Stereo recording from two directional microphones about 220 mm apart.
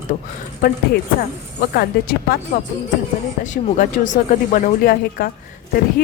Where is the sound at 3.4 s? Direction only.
35° left (ahead or behind).